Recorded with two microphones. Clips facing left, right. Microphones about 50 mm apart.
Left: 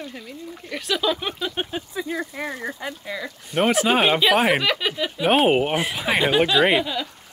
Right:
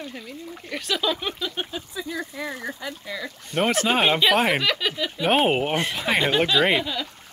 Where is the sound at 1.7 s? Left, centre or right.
Left.